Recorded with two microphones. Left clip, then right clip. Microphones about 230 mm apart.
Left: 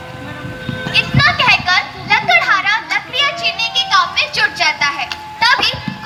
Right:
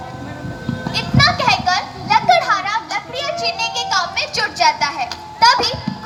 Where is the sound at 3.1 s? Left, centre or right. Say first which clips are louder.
Left 4 dB; right.